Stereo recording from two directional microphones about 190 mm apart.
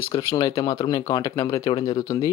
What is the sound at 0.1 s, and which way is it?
Speech, 20° left (ahead or behind).